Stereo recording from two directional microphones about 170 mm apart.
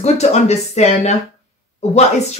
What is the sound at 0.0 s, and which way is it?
Speech, 40° left (ahead or behind).